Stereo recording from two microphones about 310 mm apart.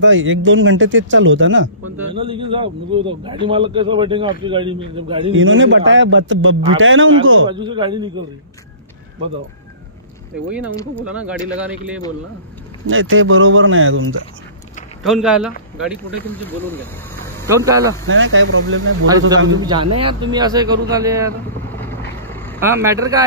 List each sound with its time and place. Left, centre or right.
0.0 s speech: right
2.1 s a man's voice: centre
5.3 s speech: right
7.4 s a man's voice: centre
12.8 s speech: right
15.0 s speech: centre
17.5 s a man's voice: centre
18.0 s speech: right
19.6 s a man's voice: centre
21.6 s vehicle: centre
22.6 s a man's voice: centre